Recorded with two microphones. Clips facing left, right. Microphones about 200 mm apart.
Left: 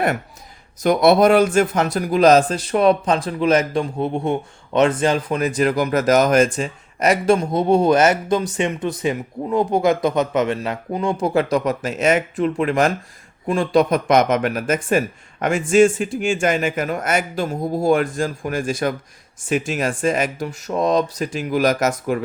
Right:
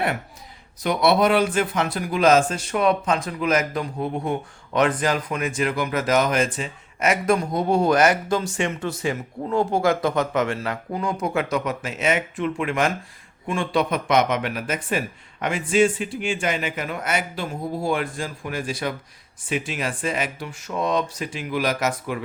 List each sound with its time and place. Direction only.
0.8 s speech: 45° left (ahead or behind)
7.3 s a man's voice: 25° left (ahead or behind); by 22.2 s 45° left (ahead or behind)